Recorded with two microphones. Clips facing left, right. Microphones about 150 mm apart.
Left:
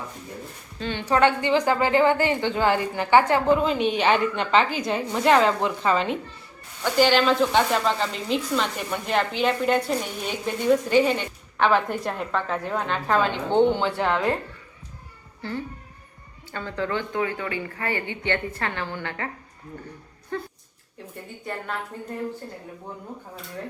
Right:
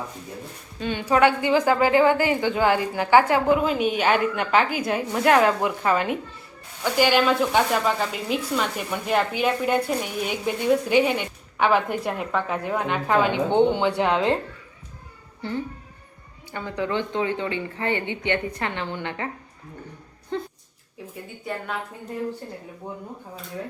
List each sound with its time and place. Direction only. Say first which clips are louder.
0.8 s speech: right 1 dB; 15° right (ahead or behind)
15.4 s a child's voice: right 2 dB; 20° right (ahead or behind)
20.3 s speech: right 2 dB; 20° right (ahead or behind)